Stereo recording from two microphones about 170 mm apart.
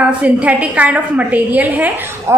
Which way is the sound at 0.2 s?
10° right (ahead or behind).